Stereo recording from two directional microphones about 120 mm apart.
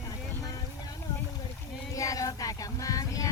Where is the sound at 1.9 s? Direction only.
30° left (ahead or behind).